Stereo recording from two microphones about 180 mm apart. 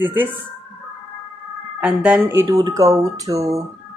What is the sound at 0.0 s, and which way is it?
Speech, 10° right (ahead or behind).